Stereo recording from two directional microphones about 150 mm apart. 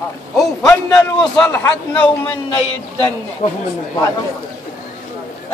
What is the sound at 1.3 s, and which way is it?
Speech, 10° left (ahead or behind).